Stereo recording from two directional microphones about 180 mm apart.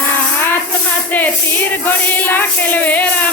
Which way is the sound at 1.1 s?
10° left (ahead or behind).